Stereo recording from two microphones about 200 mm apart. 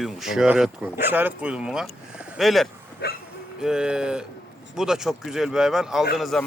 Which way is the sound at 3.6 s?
5° right (ahead or behind).